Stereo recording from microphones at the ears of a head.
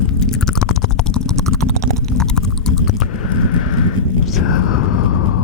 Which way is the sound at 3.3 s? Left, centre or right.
Left.